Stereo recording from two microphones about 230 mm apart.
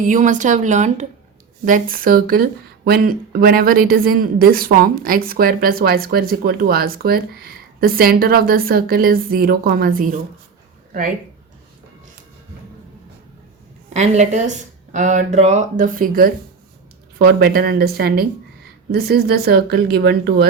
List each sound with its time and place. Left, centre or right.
0.0 s speech: right
13.9 s a woman's voice: right